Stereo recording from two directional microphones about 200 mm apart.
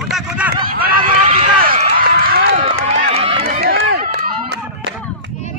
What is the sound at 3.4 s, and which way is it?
Run, 50° right (ahead or behind).